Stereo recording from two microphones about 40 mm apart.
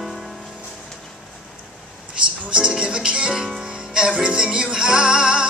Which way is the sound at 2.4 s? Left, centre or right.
Right.